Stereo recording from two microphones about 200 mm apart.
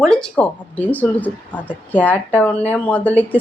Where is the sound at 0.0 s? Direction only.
5° left (ahead or behind).